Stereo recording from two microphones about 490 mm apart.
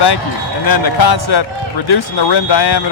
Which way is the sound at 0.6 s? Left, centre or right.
Left.